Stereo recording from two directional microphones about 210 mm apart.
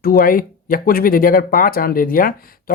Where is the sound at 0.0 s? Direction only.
45° left (ahead or behind).